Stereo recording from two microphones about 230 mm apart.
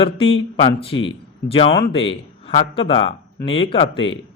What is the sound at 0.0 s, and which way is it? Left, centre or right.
Speech, left.